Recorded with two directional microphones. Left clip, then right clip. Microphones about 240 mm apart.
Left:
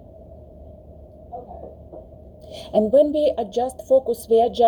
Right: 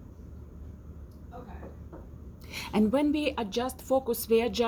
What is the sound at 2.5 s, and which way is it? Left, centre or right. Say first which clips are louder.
A woman's voice: left 10 dB; right.